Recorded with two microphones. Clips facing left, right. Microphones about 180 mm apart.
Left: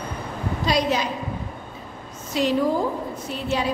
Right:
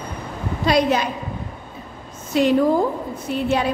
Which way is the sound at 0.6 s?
60° right (ahead or behind).